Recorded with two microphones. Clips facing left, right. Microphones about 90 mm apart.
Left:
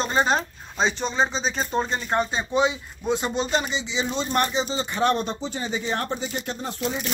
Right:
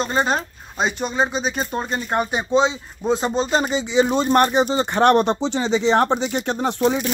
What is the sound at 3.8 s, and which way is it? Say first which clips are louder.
Speech: right 9 dB; 50° right (ahead or behind).